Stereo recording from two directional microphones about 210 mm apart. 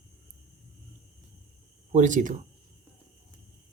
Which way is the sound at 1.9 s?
35° right (ahead or behind).